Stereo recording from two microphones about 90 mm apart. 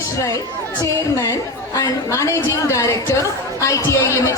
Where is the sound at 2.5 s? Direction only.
35° left (ahead or behind).